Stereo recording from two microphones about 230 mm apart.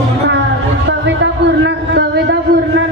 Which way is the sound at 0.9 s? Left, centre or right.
Right.